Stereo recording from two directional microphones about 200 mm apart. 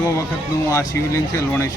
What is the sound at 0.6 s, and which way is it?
Speech, 15° left (ahead or behind).